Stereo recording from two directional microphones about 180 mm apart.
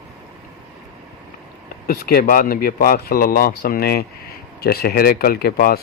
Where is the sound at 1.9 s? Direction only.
60° left (ahead or behind).